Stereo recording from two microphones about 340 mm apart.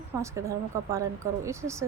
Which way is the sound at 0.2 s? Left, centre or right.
Centre.